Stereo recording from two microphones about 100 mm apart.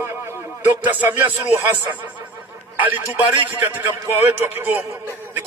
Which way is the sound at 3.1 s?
15° right (ahead or behind).